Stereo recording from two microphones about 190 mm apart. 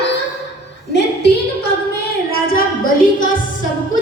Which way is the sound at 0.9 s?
60° left (ahead or behind).